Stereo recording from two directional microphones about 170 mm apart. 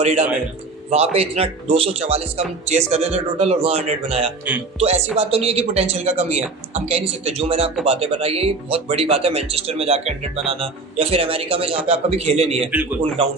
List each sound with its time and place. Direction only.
0.0 s speech: 40° right (ahead or behind)